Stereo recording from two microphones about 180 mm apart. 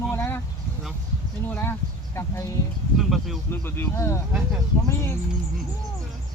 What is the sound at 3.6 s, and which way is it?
Speech, 15° left (ahead or behind).